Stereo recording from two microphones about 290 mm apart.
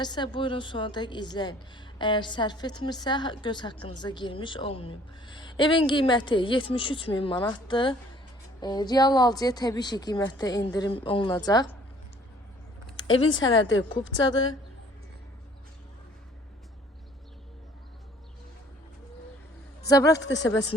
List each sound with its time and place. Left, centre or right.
0.0 s a woman's voice: centre
13.0 s speech: left
13.3 s a woman's voice: centre
13.6 s speech: left
19.8 s a man's voice: centre
20.1 s speech: left